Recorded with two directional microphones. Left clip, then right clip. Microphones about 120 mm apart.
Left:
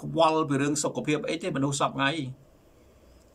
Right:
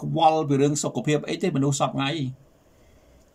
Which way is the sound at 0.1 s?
25° right (ahead or behind).